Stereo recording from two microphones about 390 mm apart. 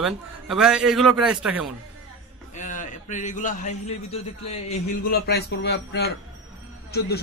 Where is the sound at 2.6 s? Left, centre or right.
Centre.